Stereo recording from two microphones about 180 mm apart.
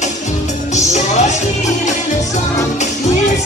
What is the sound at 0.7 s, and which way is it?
Music, 40° left (ahead or behind).